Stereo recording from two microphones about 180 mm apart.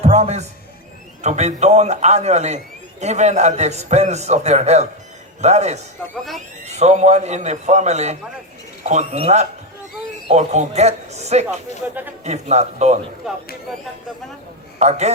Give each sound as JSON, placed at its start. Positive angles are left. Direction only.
{"t": 0.0, "sound": "a man's voice", "side_deg": -40}
{"t": 14.8, "sound": "a man's voice", "side_deg": -40}